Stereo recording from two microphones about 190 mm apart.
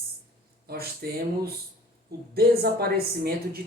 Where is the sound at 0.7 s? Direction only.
55° right (ahead or behind).